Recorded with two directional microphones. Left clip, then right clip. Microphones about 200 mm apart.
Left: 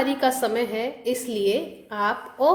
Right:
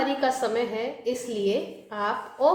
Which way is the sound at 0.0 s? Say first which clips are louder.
Left 2 dB; 35° left (ahead or behind).